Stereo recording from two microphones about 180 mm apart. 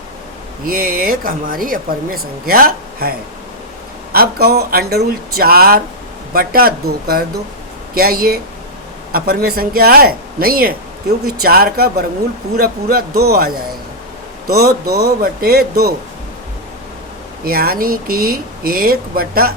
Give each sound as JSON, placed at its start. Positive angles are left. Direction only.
{"t": 0.6, "sound": "speech", "side_deg": -50}
{"t": 17.4, "sound": "speech", "side_deg": -55}